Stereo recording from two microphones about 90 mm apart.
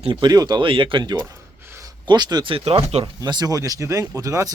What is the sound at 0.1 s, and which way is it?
Speech, 50° right (ahead or behind).